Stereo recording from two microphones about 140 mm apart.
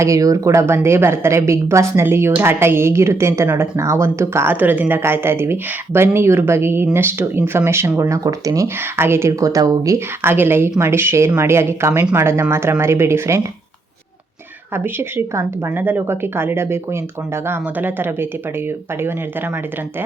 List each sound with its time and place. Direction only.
0.0 s speech: 25° right (ahead or behind)
14.9 s a woman's voice: 15° right (ahead or behind)